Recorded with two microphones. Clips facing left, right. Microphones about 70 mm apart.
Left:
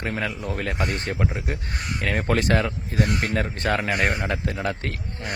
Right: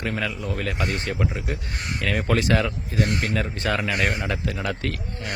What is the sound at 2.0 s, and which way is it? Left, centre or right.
Speech, left.